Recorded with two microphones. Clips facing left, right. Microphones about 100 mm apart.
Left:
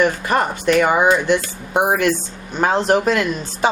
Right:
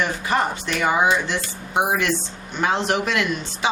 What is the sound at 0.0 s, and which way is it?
A woman's voice, 50° left (ahead or behind).